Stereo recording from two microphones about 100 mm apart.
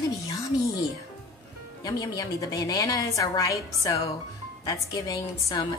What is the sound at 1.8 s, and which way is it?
A woman's voice, 40° left (ahead or behind).